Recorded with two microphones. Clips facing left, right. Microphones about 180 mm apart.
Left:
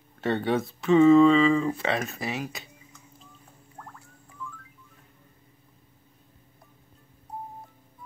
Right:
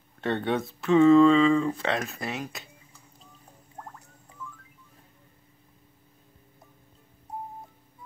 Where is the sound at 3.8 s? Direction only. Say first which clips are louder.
Right 2 dB; 25° right (ahead or behind).